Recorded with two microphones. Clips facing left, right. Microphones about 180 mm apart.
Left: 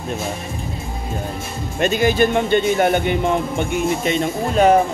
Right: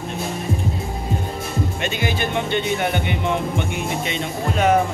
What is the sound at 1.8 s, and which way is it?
Speech, 40° left (ahead or behind).